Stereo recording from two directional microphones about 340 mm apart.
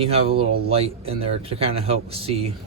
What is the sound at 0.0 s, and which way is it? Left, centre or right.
Speech, centre.